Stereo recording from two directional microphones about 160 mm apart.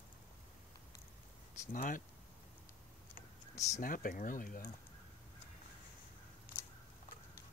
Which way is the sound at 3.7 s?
60° left (ahead or behind).